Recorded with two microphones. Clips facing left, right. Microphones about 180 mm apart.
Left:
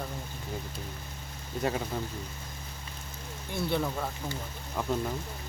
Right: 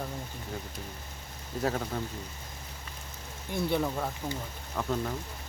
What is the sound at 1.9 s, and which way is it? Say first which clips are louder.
Speech: even; 5° left (ahead or behind).